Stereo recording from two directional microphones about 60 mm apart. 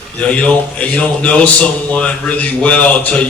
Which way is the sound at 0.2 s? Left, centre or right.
Centre.